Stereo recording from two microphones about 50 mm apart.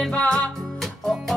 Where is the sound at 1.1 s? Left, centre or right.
Centre.